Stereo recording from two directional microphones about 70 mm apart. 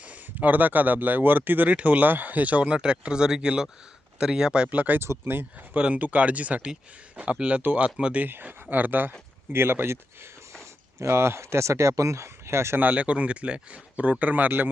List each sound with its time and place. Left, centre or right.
0.0 s speech: right
4.9 s speech: right
5.7 s speech: centre; by 12.8 s right
12.8 s speech: right